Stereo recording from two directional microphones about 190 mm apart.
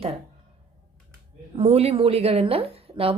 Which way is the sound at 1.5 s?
35° right (ahead or behind).